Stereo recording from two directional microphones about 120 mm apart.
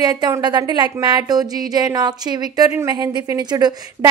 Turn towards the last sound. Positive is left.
turn(degrees=-35)  # may be behind; listen again after turning